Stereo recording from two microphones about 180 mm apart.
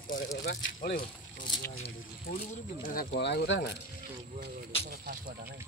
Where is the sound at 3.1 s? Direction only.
70° left (ahead or behind).